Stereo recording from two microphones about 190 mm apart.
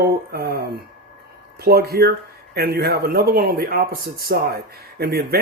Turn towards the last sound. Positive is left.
turn(degrees=-55)  # may be behind; listen again after turning